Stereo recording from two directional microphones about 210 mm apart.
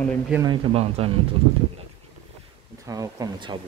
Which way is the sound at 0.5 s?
30° right (ahead or behind).